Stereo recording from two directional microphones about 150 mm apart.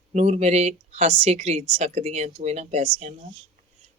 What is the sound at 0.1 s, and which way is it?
Speech, 50° right (ahead or behind).